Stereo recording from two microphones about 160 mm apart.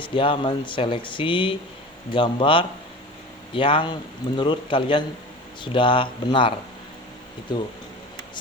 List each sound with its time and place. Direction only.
0.0 s speech: 30° left (ahead or behind)